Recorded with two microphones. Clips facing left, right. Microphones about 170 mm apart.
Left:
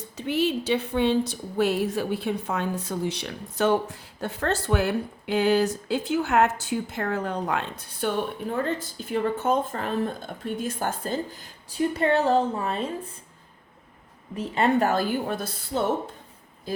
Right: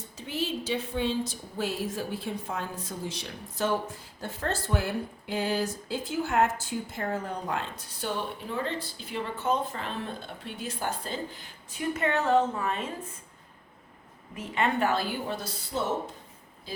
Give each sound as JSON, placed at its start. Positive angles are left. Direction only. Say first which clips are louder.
{"t": 0.2, "sound": "a woman's voice", "louder": "left 8 dB", "side_deg": 65}
{"t": 8.0, "sound": "speech", "louder": "left 6 dB", "side_deg": 50}
{"t": 14.3, "sound": "speech", "louder": "left 6 dB", "side_deg": 35}